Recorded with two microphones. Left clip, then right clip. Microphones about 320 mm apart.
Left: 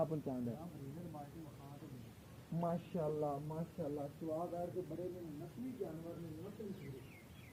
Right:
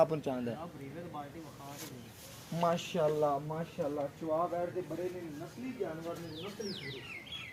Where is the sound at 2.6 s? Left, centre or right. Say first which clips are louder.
Right 10 dB; right.